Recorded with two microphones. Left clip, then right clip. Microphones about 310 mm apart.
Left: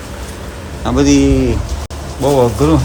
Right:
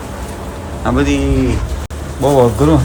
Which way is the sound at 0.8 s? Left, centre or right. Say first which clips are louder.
Left 3 dB; centre.